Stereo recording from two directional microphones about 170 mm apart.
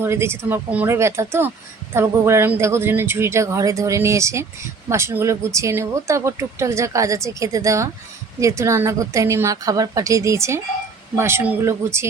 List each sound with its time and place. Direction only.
0.0 s speech: 15° right (ahead or behind)